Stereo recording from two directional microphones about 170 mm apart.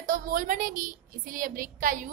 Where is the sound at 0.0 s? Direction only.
55° right (ahead or behind).